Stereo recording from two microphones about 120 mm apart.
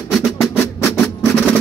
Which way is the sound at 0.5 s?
20° left (ahead or behind).